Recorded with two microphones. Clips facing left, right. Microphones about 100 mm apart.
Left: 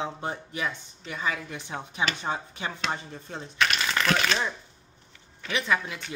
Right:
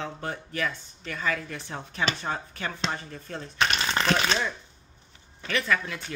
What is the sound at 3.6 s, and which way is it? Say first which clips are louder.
Speech: even; 30° right (ahead or behind).